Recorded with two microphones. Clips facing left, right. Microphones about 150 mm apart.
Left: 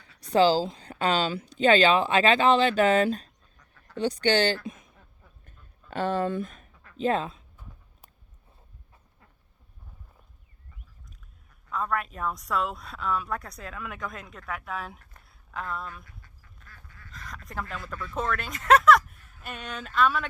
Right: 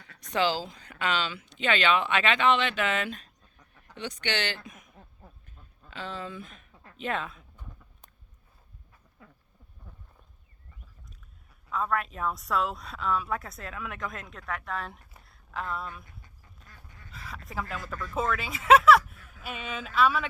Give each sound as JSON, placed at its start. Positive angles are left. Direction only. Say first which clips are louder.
{"t": 0.2, "sound": "speech", "louder": "left 7 dB", "side_deg": 35}
{"t": 4.6, "sound": "a sound", "louder": "left 9 dB", "side_deg": 30}
{"t": 5.9, "sound": "speech", "louder": "left 11 dB", "side_deg": 55}
{"t": 7.0, "sound": "speech", "louder": "left 7 dB", "side_deg": 30}
{"t": 11.7, "sound": "a woman's voice", "louder": "even", "side_deg": 0}
{"t": 15.2, "sound": "a sound", "louder": "right 1 dB", "side_deg": 0}
{"t": 16.2, "sound": "duck", "louder": "even", "side_deg": -20}
{"t": 17.1, "sound": "a sound", "louder": "even", "side_deg": -5}
{"t": 17.8, "sound": "a woman's voice", "louder": "right 1 dB", "side_deg": 0}